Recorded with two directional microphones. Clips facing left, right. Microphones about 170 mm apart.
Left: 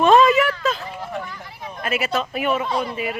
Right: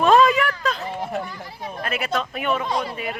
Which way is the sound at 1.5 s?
35° right (ahead or behind).